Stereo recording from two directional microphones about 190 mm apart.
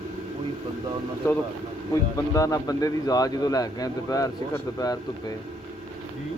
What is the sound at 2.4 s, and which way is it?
Speech, 20° left (ahead or behind).